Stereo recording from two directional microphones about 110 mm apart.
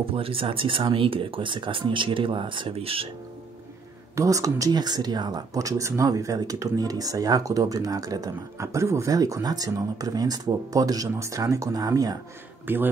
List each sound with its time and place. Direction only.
0.0 s speech: 55° right (ahead or behind)
4.1 s speech: 30° right (ahead or behind)
12.7 s speech: 15° right (ahead or behind)